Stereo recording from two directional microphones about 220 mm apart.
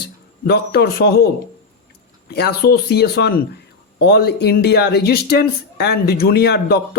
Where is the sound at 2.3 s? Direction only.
45° left (ahead or behind).